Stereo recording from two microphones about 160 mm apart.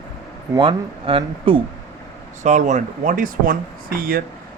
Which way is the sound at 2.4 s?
50° right (ahead or behind).